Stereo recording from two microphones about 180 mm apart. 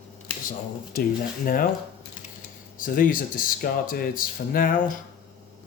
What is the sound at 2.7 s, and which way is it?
Speech, 50° left (ahead or behind).